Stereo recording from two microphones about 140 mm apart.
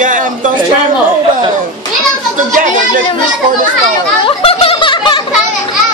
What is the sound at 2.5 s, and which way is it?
Speech, 70° right (ahead or behind).